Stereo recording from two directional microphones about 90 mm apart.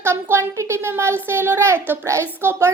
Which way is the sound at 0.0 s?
30° right (ahead or behind).